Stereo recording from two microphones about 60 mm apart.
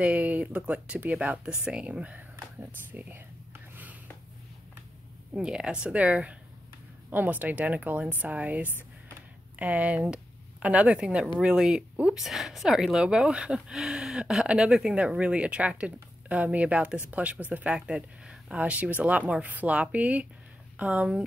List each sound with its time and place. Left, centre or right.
0.0 s speech: right
1.6 s speech: centre
2.9 s whispering: right
5.3 s speech: centre
12.3 s speech: centre; by 17.7 s right
17.7 s speech: centre
18.6 s speech: right